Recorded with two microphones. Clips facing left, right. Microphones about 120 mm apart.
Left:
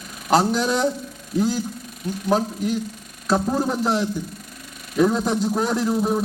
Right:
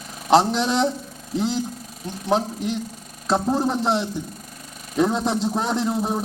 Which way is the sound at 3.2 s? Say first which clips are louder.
Even; 25° right (ahead or behind).